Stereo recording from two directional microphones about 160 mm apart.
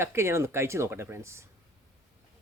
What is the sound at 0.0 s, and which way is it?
Speech, 15° right (ahead or behind).